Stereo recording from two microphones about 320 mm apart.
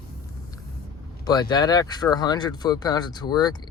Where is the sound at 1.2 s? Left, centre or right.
Centre.